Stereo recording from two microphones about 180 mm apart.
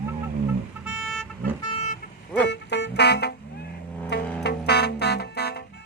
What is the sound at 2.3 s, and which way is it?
Vehicle, 70° left (ahead or behind).